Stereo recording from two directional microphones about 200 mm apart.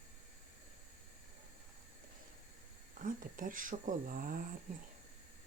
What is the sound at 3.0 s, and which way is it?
Speech, 40° right (ahead or behind).